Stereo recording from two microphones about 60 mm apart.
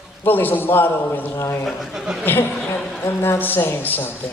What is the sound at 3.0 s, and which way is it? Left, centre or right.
Speech, left.